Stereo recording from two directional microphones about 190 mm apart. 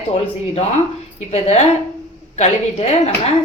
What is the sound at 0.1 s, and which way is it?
A woman's voice, 30° left (ahead or behind).